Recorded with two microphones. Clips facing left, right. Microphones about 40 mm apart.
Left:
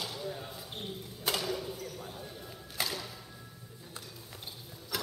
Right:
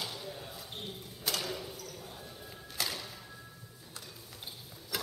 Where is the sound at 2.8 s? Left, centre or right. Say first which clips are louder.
Left 1 dB; left.